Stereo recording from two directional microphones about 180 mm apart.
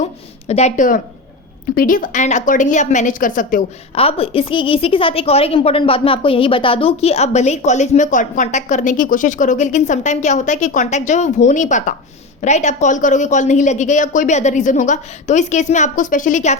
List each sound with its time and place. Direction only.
0.0 s a woman's voice: 35° left (ahead or behind)
3.9 s a woman's voice: 30° left (ahead or behind)